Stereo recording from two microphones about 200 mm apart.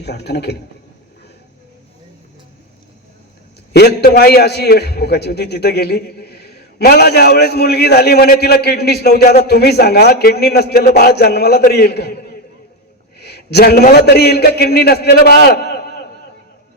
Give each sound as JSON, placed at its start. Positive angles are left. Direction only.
{"t": 0.0, "sound": "a man's voice", "side_deg": 55}
{"t": 3.7, "sound": "a man's voice", "side_deg": 55}